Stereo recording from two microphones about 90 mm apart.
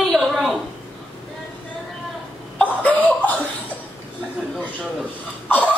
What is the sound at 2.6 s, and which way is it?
Cough, 15° left (ahead or behind).